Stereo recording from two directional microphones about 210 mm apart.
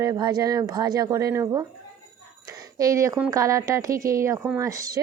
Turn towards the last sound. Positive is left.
turn(degrees=-15)  # may be behind; listen again after turning